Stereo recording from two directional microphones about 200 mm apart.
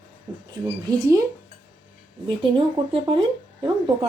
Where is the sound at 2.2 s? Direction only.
25° right (ahead or behind).